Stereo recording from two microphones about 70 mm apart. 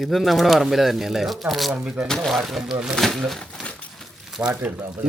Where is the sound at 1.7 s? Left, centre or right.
Centre.